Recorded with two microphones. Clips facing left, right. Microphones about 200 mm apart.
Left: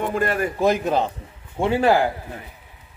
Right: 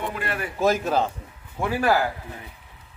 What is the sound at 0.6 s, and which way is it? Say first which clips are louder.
Speech: even; 15° left (ahead or behind).